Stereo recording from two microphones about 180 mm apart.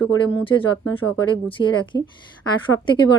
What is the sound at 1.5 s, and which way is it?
Speech, 25° left (ahead or behind).